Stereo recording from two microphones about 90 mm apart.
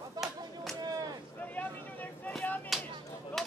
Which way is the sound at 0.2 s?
40° right (ahead or behind).